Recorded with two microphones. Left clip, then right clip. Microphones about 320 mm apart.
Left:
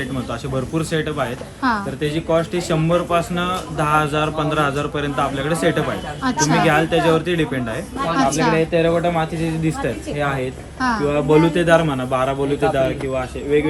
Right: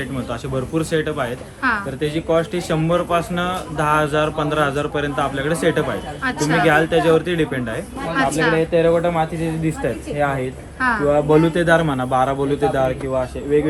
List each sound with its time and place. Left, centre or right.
0.5 s a man's voice: centre